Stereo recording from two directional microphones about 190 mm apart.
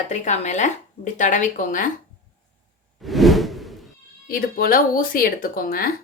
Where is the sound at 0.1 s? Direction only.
40° left (ahead or behind).